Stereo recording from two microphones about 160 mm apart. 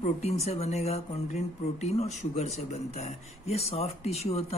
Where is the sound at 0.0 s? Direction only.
45° left (ahead or behind).